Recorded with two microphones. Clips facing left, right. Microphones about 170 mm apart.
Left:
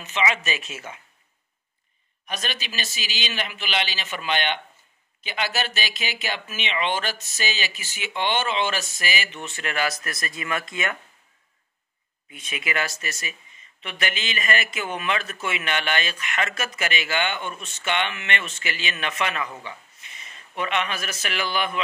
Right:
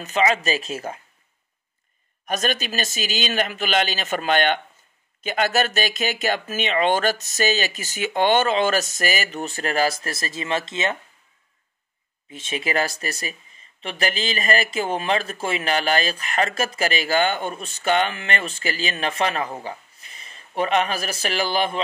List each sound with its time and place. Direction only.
0.0 s speech: 40° right (ahead or behind)
2.2 s speech: 45° right (ahead or behind); by 11.0 s 25° right (ahead or behind)
12.3 s speech: 30° right (ahead or behind)